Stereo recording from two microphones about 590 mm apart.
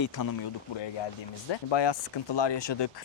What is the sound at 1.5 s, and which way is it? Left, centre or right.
Speech, left.